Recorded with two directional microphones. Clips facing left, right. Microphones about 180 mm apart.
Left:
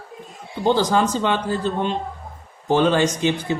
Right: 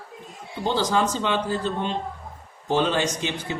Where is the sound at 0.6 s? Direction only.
50° left (ahead or behind).